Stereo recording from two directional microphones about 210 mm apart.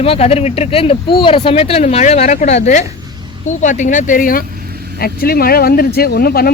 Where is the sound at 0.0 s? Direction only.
30° left (ahead or behind).